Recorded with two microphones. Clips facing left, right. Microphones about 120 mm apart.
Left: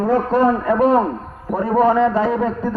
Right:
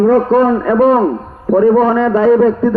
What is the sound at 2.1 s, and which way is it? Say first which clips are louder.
Speech: right 9 dB; 85° right.